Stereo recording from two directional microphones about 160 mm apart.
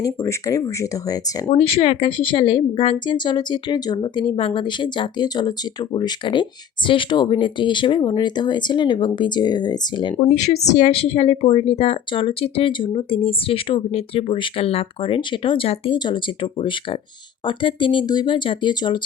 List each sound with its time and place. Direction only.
0.0 s a woman's voice: 20° left (ahead or behind)
1.5 s a woman's voice: 40° left (ahead or behind)
10.3 s a woman's voice: 45° left (ahead or behind); by 18.9 s 30° left (ahead or behind)